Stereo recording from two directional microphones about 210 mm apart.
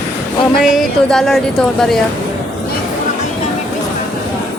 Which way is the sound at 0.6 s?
Centre (ahead or behind).